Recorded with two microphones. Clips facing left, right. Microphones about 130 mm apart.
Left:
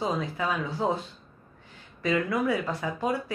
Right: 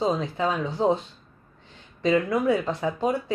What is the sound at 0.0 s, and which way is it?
Speech, 25° right (ahead or behind).